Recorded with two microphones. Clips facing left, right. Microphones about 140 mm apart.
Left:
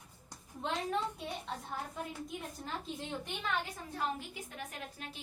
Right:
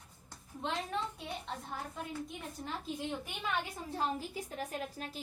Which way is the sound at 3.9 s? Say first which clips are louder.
Right 2 dB; 35° right (ahead or behind).